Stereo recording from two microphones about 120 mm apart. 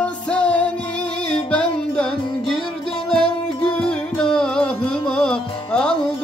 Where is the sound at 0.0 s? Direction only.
10° left (ahead or behind).